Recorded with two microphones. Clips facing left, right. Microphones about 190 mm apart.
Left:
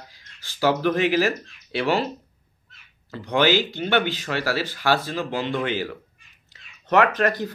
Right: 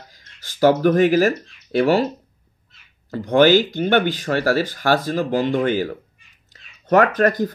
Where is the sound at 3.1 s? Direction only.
45° right (ahead or behind).